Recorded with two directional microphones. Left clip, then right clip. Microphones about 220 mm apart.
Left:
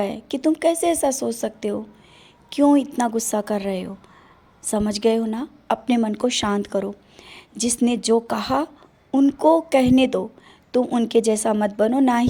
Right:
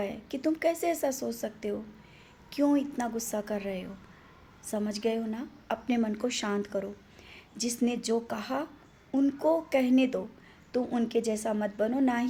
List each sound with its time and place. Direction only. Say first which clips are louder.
0.0 s a woman's voice: left 9 dB; 40° left (ahead or behind)